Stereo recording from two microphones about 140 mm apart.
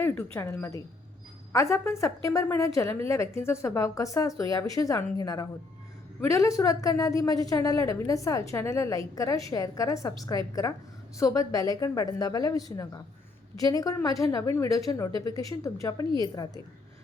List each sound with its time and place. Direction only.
0.0 s a woman's voice: 15° left (ahead or behind)